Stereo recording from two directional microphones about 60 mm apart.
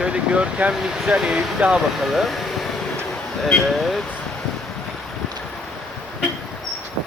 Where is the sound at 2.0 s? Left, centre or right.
Centre.